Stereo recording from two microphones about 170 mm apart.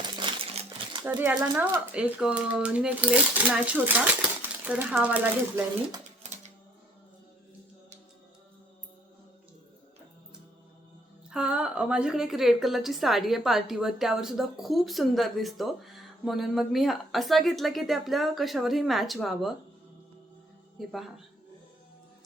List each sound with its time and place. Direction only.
0.2 s crumpling: 30° right (ahead or behind)
1.0 s speech: 10° right (ahead or behind)
11.3 s a woman's voice: 5° right (ahead or behind)
20.7 s a woman's voice: centre (ahead or behind)